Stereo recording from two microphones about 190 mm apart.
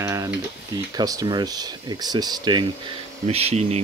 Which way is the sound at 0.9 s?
20° right (ahead or behind).